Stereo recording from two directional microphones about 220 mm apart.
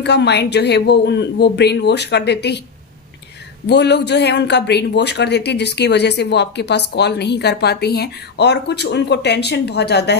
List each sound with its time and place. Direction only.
0.0 s speech: 50° left (ahead or behind)
3.6 s speech: 50° left (ahead or behind)